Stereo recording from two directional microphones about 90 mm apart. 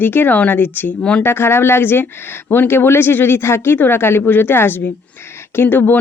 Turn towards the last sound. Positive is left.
turn(degrees=20)  # may be behind; listen again after turning